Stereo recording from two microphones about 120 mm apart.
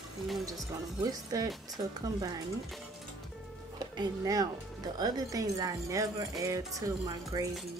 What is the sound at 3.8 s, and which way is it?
Speech, 30° right (ahead or behind).